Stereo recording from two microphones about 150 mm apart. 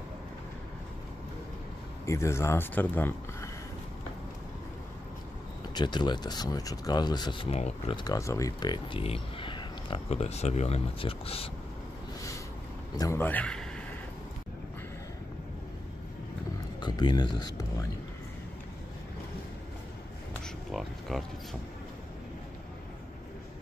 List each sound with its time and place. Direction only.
2.0 s speech: 20° left (ahead or behind)
5.8 s speech: 30° left (ahead or behind)
7.4 s speech: 40° left (ahead or behind)
8.0 s speech: 25° left (ahead or behind); by 11.5 s 40° left (ahead or behind)
12.9 s speech: 25° left (ahead or behind)
13.2 s speech: 10° left (ahead or behind)
16.8 s speech: 30° left (ahead or behind)
21.1 s speech: centre (ahead or behind)